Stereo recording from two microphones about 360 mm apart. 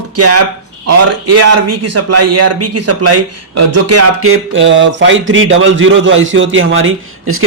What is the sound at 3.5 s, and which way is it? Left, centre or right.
Music, right.